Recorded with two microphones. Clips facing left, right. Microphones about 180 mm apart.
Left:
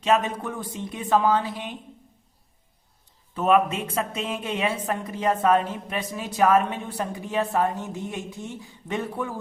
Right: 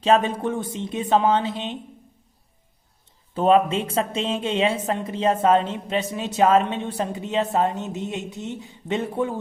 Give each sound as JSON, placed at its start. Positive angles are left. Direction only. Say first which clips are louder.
{"t": 0.0, "sound": "a woman's voice", "louder": "right 4 dB", "side_deg": -30}
{"t": 3.3, "sound": "a woman's voice", "louder": "right 3 dB", "side_deg": -30}